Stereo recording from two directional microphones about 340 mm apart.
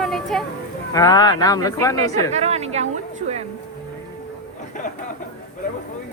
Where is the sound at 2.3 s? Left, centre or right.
Centre.